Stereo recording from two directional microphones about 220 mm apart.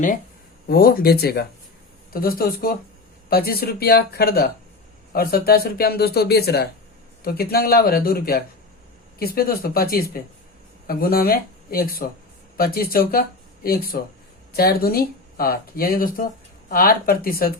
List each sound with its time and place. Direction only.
0.7 s speech: 40° left (ahead or behind)